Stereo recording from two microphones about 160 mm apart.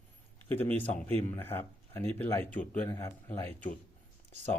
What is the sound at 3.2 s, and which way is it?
Speech, 15° left (ahead or behind).